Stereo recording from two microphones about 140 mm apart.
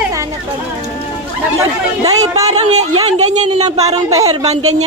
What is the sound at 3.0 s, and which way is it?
Speech, 55° right (ahead or behind).